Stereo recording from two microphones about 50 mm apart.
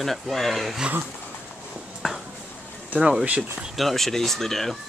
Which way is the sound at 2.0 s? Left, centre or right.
Centre.